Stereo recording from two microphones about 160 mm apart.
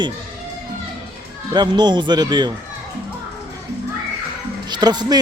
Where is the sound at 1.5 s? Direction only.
25° right (ahead or behind).